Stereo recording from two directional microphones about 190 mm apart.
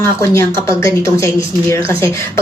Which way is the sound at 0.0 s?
15° left (ahead or behind).